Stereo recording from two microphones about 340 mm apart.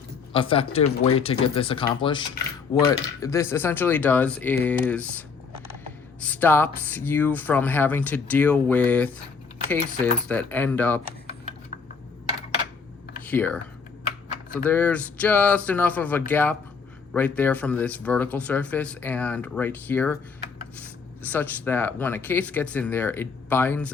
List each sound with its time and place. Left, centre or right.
0.3 s speech: centre
6.2 s speech: centre
10.2 s speech: centre
13.2 s speech: centre
21.2 s speech: centre